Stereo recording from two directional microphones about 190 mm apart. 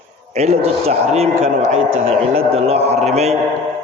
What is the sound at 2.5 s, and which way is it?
Speech, 35° right (ahead or behind).